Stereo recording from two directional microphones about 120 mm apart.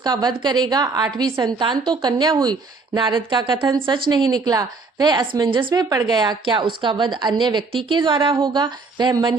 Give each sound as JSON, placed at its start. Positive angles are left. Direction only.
{"t": 0.0, "sound": "a woman's voice", "side_deg": -35}